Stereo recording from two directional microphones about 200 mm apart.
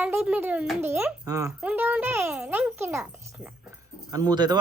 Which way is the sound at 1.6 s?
10° right (ahead or behind).